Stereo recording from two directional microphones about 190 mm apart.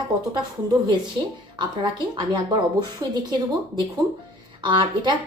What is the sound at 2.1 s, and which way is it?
Speech, 20° right (ahead or behind).